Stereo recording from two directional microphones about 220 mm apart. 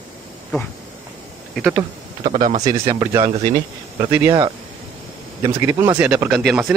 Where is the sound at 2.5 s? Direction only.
20° right (ahead or behind).